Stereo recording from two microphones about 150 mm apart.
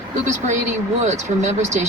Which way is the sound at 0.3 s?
55° right (ahead or behind).